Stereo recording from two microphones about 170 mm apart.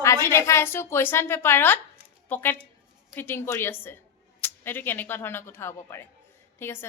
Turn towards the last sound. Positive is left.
turn(degrees=15)  # may be behind; listen again after turning